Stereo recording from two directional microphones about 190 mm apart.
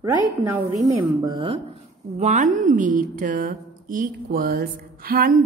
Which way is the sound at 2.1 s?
40° right (ahead or behind).